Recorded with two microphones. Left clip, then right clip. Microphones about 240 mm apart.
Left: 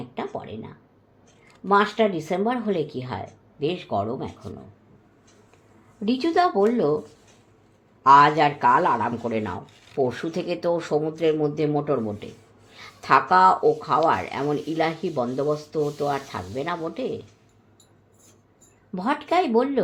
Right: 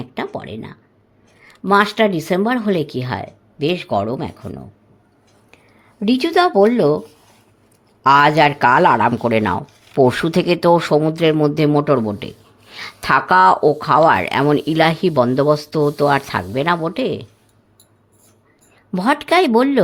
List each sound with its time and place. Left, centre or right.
0.1 s a sound: right
1.6 s speech: right
6.1 s speech: right
8.0 s speech: right
18.9 s speech: right